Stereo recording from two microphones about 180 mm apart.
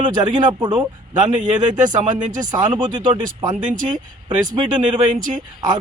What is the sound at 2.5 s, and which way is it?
Speech, 25° right (ahead or behind).